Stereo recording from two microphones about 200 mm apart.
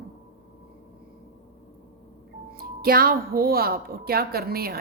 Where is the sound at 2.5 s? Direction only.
45° right (ahead or behind).